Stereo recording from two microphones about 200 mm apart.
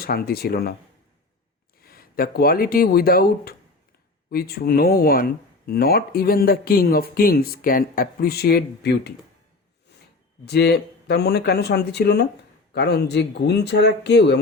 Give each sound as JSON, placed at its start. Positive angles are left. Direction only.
{"t": 0.0, "sound": "speech", "side_deg": 50}
{"t": 1.8, "sound": "speech", "side_deg": 50}
{"t": 9.9, "sound": "a sound", "side_deg": 60}
{"t": 10.4, "sound": "speech", "side_deg": 55}